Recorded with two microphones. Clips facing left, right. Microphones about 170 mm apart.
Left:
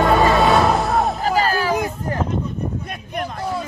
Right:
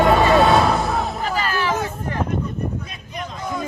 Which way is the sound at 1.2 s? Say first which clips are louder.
Left 4 dB; 40° left (ahead or behind).